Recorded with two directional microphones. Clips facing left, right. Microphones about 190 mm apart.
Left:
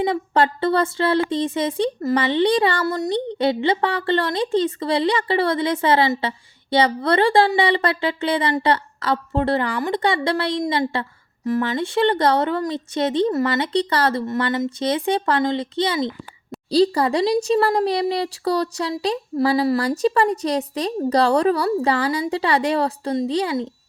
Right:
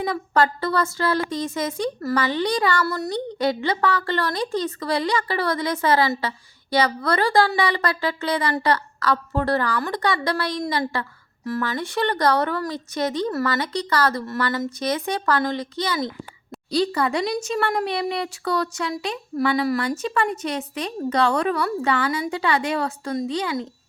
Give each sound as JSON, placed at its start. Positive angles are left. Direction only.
{"t": 0.0, "sound": "speech", "side_deg": 25}